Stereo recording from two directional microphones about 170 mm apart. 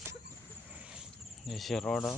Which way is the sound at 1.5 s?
Centre (ahead or behind).